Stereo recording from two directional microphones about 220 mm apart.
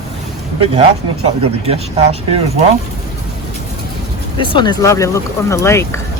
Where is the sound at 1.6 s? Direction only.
25° right (ahead or behind).